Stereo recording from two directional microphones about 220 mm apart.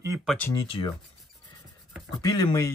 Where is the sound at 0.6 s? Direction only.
25° left (ahead or behind).